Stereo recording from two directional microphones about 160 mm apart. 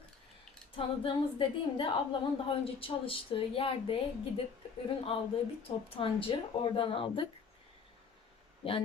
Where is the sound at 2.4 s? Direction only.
35° left (ahead or behind).